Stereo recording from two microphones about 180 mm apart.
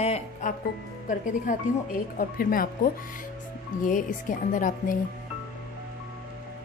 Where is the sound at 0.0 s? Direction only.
40° left (ahead or behind).